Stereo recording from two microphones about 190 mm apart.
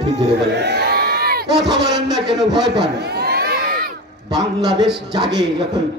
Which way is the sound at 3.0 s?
55° right (ahead or behind).